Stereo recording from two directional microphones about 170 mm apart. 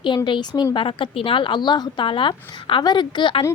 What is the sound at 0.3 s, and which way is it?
A woman's voice, 25° left (ahead or behind).